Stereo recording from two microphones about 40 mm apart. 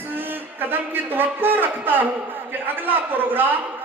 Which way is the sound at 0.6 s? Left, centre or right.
Right.